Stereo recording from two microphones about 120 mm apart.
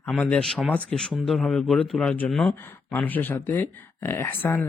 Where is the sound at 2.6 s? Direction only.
15° left (ahead or behind).